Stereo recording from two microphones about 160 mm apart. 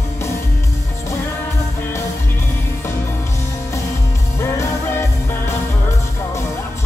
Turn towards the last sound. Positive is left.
turn(degrees=15)  # may be behind; listen again after turning